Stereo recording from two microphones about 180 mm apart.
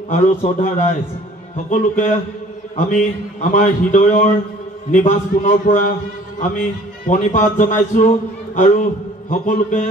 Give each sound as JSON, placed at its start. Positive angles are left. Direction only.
{"t": 0.1, "sound": "a man's voice", "side_deg": 45}
{"t": 7.1, "sound": "a man's voice", "side_deg": 45}